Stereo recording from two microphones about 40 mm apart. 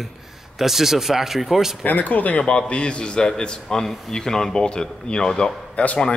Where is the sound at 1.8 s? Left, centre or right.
Left.